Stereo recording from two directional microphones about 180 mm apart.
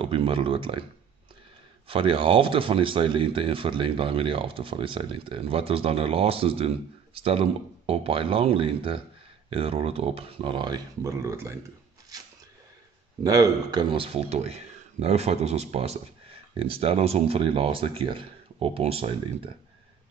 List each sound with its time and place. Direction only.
0.0 s speech: 30° right (ahead or behind)
1.9 s speech: 30° right (ahead or behind)
12.1 s a sound: 20° right (ahead or behind)
13.2 s speech: 20° right (ahead or behind)